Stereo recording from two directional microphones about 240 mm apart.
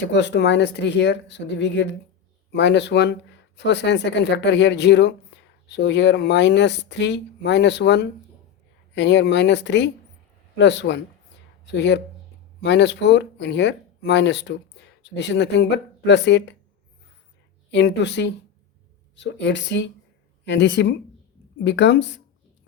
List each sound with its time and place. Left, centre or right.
0.0 s speech: left
17.7 s speech: left